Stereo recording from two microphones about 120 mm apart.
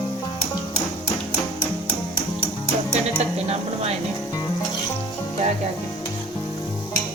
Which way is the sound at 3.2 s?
65° right (ahead or behind).